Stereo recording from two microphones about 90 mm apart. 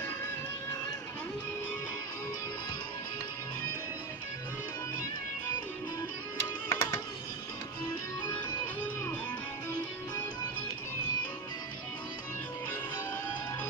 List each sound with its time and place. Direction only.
6.7 s music: 35° left (ahead or behind)